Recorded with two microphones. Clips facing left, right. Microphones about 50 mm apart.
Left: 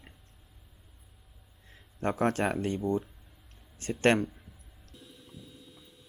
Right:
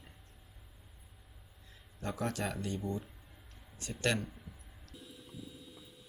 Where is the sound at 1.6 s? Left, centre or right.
Left.